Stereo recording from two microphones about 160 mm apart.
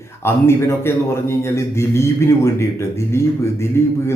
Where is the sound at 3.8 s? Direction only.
15° left (ahead or behind).